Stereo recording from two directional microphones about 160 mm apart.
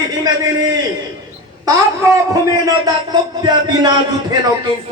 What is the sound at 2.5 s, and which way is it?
A man's voice, 25° right (ahead or behind).